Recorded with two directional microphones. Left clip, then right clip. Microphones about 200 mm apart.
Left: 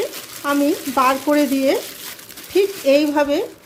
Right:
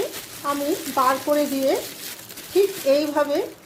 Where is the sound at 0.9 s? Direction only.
35° left (ahead or behind).